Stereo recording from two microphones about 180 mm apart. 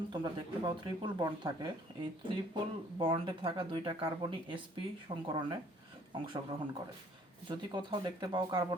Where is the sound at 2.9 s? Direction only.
30° right (ahead or behind).